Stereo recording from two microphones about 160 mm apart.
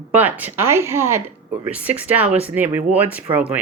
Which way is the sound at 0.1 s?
10° right (ahead or behind).